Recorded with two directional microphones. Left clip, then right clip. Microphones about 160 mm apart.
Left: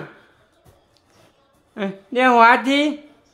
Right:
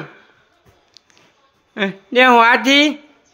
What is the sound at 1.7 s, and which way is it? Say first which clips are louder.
Speech: right 6 dB; 15° right (ahead or behind).